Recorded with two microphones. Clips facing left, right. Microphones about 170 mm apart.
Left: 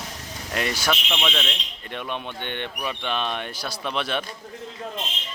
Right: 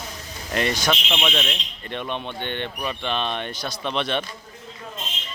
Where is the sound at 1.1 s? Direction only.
10° right (ahead or behind).